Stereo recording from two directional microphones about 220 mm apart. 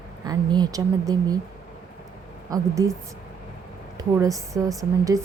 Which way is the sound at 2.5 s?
15° right (ahead or behind).